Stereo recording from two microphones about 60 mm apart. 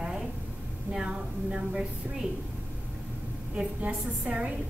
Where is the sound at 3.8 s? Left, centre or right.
Right.